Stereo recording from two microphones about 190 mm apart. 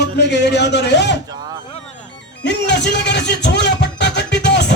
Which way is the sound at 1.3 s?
20° right (ahead or behind).